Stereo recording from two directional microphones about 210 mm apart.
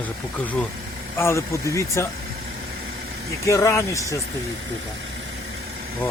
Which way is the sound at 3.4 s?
15° left (ahead or behind).